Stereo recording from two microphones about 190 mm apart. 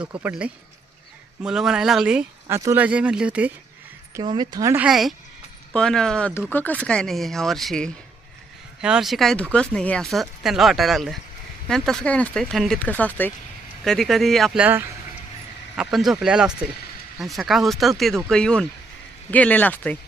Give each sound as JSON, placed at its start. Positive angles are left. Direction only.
{"t": 0.0, "sound": "speech", "side_deg": -10}
{"t": 4.1, "sound": "speech", "side_deg": -25}
{"t": 4.9, "sound": "speech", "side_deg": 0}